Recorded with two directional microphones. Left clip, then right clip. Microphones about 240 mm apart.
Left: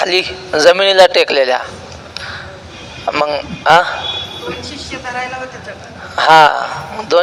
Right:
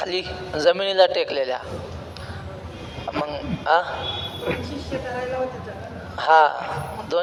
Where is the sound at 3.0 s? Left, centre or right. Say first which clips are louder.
Left 12 dB; left.